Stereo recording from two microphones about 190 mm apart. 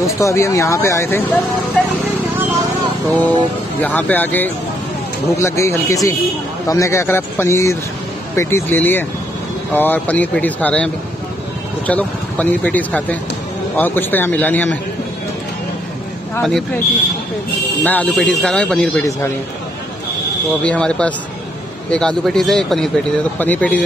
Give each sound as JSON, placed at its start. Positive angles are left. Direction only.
{"t": 0.0, "sound": "speech", "side_deg": 15}
{"t": 3.1, "sound": "speech", "side_deg": 10}
{"t": 16.4, "sound": "speech", "side_deg": 0}
{"t": 17.8, "sound": "speech", "side_deg": 10}
{"t": 20.6, "sound": "speech", "side_deg": 5}